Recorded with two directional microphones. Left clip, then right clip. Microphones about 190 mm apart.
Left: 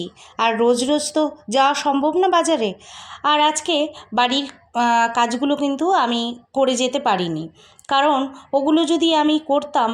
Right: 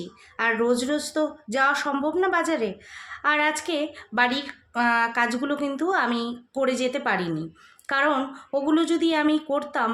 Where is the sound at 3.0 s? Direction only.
25° left (ahead or behind).